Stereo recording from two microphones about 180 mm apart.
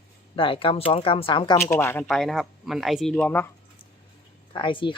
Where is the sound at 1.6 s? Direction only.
15° left (ahead or behind).